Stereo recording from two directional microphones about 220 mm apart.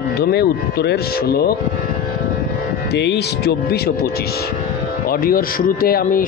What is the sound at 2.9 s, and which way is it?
Speech, 50° left (ahead or behind).